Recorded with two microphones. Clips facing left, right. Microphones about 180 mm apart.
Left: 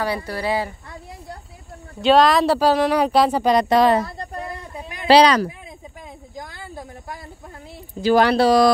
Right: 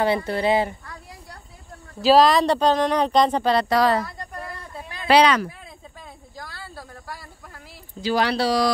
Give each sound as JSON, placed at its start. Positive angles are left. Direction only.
{"t": 0.0, "sound": "speech", "side_deg": -25}
{"t": 2.0, "sound": "speech", "side_deg": 0}
{"t": 4.4, "sound": "a sound", "side_deg": 20}
{"t": 5.0, "sound": "speech", "side_deg": 35}
{"t": 6.3, "sound": "a sound", "side_deg": 20}
{"t": 8.0, "sound": "speech", "side_deg": 50}